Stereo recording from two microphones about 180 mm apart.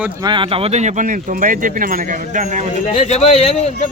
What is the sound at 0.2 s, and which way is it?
Speech, 25° right (ahead or behind).